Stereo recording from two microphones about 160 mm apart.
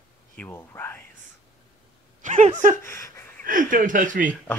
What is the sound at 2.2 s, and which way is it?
Speech, 50° right (ahead or behind).